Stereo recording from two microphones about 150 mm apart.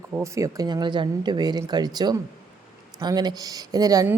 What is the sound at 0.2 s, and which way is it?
A woman's voice, 20° right (ahead or behind).